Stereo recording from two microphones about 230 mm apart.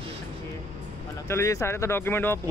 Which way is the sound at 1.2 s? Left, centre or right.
Centre.